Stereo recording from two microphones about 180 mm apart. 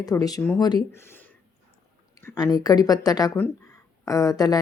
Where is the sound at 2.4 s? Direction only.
20° left (ahead or behind).